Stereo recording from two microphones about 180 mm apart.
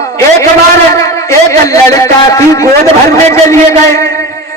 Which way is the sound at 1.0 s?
15° left (ahead or behind).